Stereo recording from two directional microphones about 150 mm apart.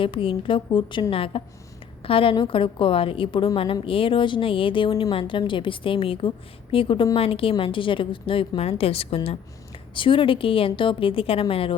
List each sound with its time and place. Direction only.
0.0 s a woman's voice: 35° left (ahead or behind)